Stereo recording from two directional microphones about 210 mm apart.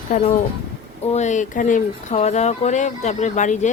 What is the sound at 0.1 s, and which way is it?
Speech, 40° left (ahead or behind).